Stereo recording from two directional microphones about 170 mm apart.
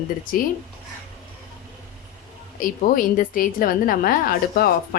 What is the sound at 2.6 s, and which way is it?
A woman's voice, 55° left (ahead or behind).